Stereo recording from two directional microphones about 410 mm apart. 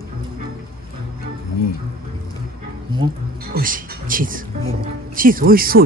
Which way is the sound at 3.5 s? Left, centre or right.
Right.